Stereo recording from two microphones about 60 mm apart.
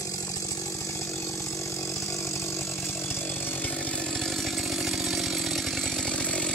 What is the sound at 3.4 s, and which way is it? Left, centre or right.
Chainsaw, left.